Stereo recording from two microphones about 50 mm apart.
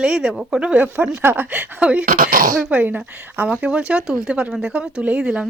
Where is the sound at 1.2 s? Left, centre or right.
Right.